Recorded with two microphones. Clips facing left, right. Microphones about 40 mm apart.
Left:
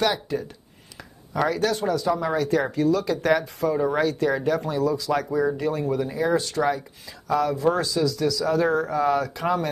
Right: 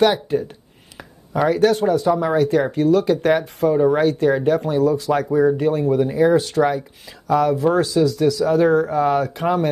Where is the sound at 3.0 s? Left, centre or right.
Right.